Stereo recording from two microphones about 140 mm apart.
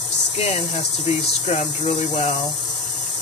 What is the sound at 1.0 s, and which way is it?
Speech, 50° left (ahead or behind).